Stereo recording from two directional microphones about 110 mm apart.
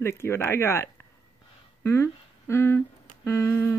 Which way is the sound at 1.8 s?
25° left (ahead or behind).